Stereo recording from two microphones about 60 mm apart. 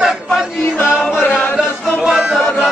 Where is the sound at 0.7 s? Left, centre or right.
Left.